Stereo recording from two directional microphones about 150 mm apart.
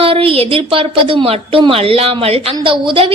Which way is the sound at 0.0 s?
40° right (ahead or behind).